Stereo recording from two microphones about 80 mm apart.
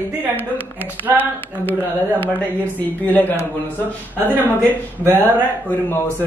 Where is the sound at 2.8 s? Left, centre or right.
Left.